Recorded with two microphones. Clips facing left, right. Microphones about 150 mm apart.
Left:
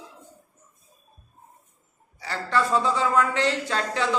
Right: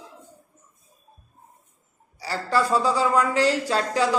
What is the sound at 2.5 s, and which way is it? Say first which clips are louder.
Speech: right 2 dB; 35° right (ahead or behind).